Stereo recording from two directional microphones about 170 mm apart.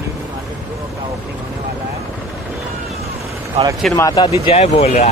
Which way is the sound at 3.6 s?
35° right (ahead or behind).